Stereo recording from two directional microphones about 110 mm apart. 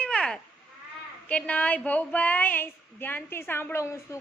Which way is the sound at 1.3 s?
15° left (ahead or behind).